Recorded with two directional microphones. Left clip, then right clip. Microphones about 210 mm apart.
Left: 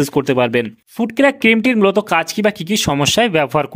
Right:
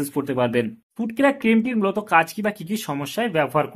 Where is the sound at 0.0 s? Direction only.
40° left (ahead or behind).